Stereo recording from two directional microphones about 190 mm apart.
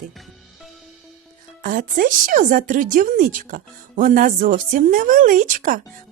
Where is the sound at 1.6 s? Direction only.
45° right (ahead or behind).